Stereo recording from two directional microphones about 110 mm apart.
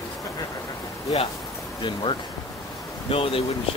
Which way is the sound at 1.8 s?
45° left (ahead or behind).